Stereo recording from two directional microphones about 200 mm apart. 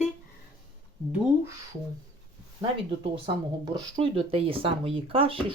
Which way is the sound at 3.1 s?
25° right (ahead or behind).